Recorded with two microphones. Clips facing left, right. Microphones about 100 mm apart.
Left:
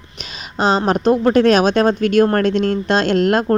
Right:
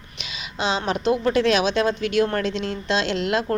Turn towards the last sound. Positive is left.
turn(degrees=50)  # may be behind; listen again after turning